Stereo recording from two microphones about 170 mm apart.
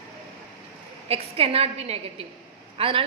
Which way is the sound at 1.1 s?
35° right (ahead or behind).